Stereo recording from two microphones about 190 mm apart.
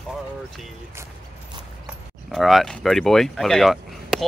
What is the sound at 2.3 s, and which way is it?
Speech, centre (ahead or behind).